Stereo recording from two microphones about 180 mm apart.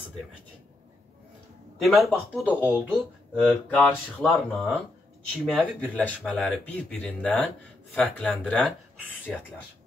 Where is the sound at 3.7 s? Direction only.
5° left (ahead or behind).